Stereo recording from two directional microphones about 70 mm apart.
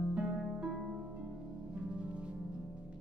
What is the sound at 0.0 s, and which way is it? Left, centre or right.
Harp, centre.